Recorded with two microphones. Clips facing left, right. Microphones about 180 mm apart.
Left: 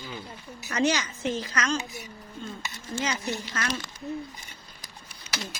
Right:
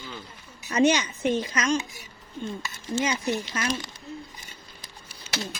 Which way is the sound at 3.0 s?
20° right (ahead or behind).